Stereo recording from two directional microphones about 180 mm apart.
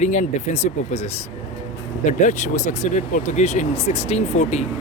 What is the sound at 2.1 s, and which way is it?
Speech, 45° left (ahead or behind).